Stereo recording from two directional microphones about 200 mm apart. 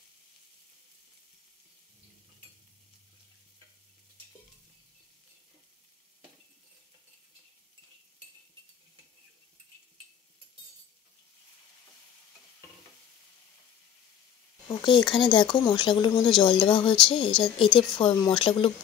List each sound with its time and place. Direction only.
14.7 s speech: 20° left (ahead or behind)